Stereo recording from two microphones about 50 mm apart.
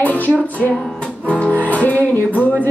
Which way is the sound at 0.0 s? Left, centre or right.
Left.